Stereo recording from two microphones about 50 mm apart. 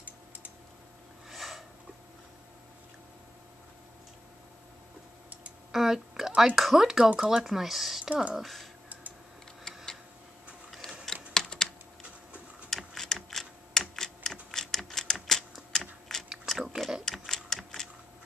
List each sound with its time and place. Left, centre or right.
1.3 s sniff: centre
5.7 s a sound: centre
6.5 s speech: centre
8.1 s speech: right
8.4 s speech: centre
11.3 s typing: centre
12.6 s computer keyboard: centre
15.1 s typewriter: centre
16.1 s a sound: centre
16.4 s a sound: centre